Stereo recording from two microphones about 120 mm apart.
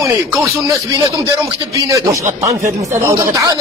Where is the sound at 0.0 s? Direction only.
30° right (ahead or behind).